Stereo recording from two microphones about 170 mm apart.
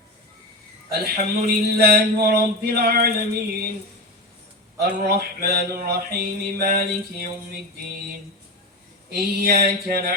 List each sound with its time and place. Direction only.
0.9 s a sound: 65° right (ahead or behind)
4.8 s mantra: 65° right (ahead or behind)
9.1 s mantra: 65° right (ahead or behind)